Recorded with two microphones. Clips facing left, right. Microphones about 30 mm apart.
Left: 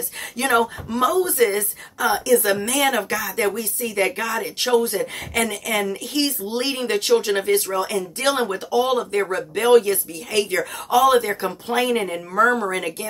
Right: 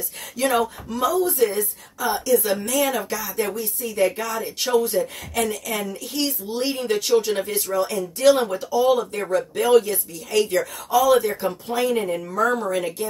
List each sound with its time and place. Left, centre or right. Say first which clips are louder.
0.4 s speech: left 2 dB; left
12.1 s speech: left 3 dB; left